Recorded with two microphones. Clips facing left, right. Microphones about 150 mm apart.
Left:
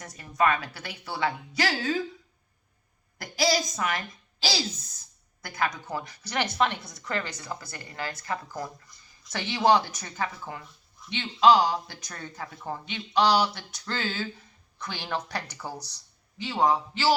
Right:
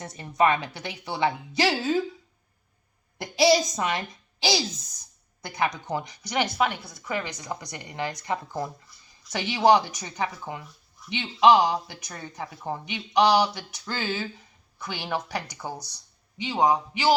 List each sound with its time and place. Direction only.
0.0 s a woman's voice: 25° right (ahead or behind)
3.3 s a woman's voice: 20° right (ahead or behind)